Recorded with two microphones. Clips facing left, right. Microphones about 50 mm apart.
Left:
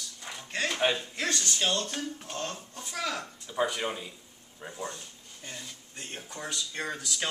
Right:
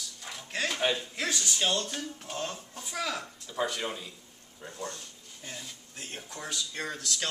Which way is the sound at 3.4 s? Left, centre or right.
Centre.